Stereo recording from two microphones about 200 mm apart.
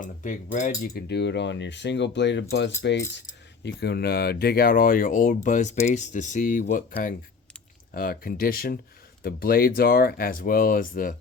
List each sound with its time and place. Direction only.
0.0 s cutlery: 40° left (ahead or behind); by 2.7 s 60° left (ahead or behind)
3.2 s speech: 60° left (ahead or behind); by 11.2 s 45° left (ahead or behind)